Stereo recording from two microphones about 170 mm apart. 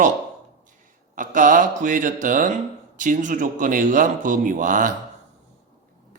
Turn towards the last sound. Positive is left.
turn(degrees=-50)  # may be behind; listen again after turning